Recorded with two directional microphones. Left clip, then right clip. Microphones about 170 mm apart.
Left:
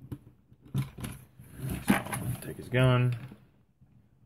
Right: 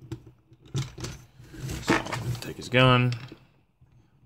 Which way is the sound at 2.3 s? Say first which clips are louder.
Right 8 dB; 25° right (ahead or behind).